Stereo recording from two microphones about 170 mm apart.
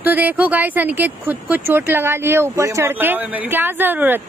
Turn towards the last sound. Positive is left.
turn(degrees=-10)  # may be behind; listen again after turning